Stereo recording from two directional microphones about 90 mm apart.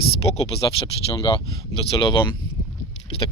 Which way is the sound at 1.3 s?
65° left (ahead or behind).